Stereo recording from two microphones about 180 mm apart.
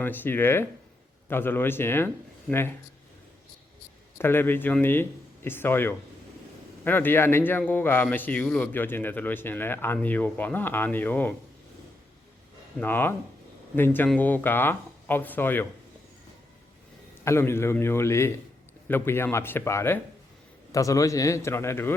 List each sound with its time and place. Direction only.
0.0 s a man's voice: 10° left (ahead or behind)
4.2 s a man's voice: 10° left (ahead or behind)
12.8 s a man's voice: 10° left (ahead or behind)
17.2 s a man's voice: 15° left (ahead or behind)